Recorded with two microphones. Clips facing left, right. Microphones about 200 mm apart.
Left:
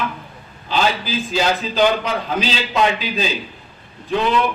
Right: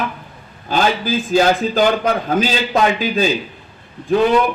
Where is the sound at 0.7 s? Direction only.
50° right (ahead or behind).